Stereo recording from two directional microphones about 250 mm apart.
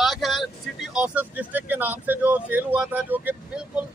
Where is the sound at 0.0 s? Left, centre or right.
Centre.